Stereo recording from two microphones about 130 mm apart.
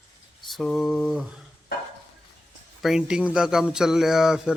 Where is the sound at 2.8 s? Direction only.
5° right (ahead or behind).